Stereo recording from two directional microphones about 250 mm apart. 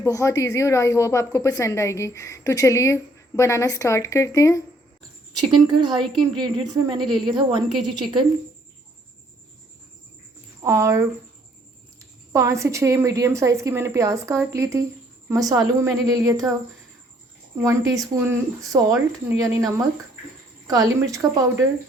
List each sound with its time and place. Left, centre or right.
0.0 s a woman's voice: centre
5.6 s a woman's voice: centre
10.6 s speech: centre
12.3 s a woman's voice: centre
17.6 s a woman's voice: centre